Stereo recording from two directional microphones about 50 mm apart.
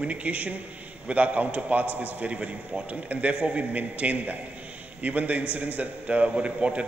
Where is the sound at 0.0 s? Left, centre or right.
Right.